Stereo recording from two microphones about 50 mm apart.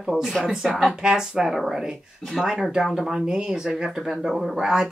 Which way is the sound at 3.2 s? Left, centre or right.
Centre.